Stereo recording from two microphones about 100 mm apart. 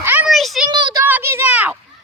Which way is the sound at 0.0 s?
20° right (ahead or behind).